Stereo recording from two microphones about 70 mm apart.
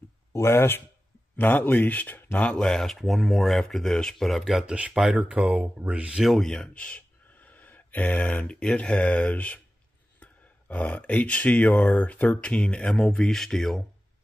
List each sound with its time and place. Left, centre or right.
0.3 s speech: left
1.3 s speech: left
2.6 s speech: centre
4.7 s speech: centre
6.2 s speech: centre